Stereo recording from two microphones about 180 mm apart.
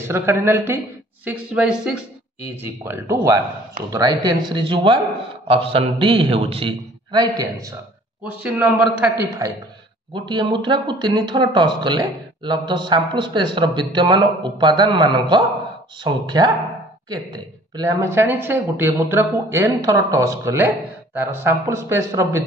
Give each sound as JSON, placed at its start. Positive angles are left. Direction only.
{"t": 0.0, "sound": "speech", "side_deg": -15}
{"t": 8.2, "sound": "speech", "side_deg": -5}
{"t": 10.1, "sound": "speech", "side_deg": -25}
{"t": 17.7, "sound": "speech", "side_deg": -15}